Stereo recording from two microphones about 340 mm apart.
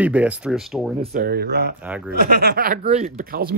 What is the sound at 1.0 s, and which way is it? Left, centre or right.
Speech, right.